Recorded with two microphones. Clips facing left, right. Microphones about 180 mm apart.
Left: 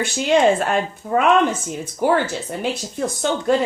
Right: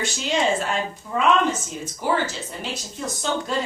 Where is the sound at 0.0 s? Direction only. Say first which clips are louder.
Left 7 dB; 55° left (ahead or behind).